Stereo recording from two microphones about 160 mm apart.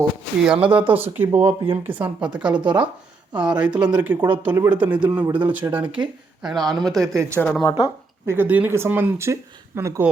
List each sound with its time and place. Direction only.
0.4 s speech: 5° right (ahead or behind)
1.4 s speech: 40° right (ahead or behind)
2.2 s speech: 5° right (ahead or behind)
6.4 s speech: centre (ahead or behind)
7.6 s speech: 20° left (ahead or behind)
8.3 s speech: 10° right (ahead or behind)